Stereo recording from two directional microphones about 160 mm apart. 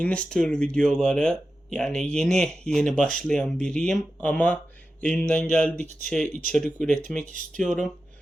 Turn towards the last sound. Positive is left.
turn(degrees=5)  # may be behind; listen again after turning